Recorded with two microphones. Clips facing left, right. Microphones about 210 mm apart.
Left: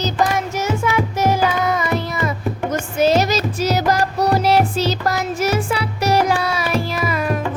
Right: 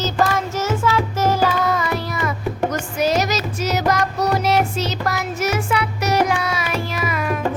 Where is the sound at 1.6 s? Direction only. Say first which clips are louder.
Left 1 dB; 20° left (ahead or behind).